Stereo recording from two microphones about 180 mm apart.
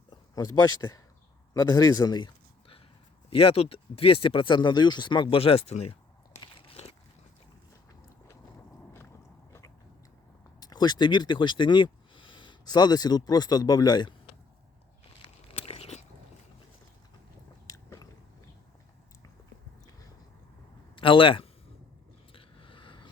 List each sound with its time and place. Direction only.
0.1 s speech: 20° left (ahead or behind)
1.5 s a sound: 20° left (ahead or behind)
3.2 s speech: 30° left (ahead or behind)
6.4 s biting: 30° left (ahead or behind)
9.5 s biting: 15° left (ahead or behind)
10.6 s speech: 20° left (ahead or behind)
15.2 s biting: 30° left (ahead or behind)
17.7 s biting: 20° left (ahead or behind)
20.9 s speech: 30° left (ahead or behind)
22.3 s a sound: 30° left (ahead or behind)